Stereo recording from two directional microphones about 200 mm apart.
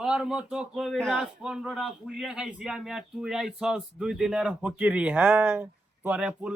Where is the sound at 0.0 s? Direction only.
5° right (ahead or behind).